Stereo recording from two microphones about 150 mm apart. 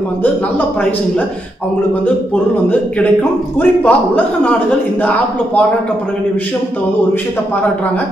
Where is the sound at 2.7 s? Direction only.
10° left (ahead or behind).